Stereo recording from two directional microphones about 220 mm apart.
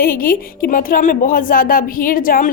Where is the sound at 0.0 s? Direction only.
40° left (ahead or behind).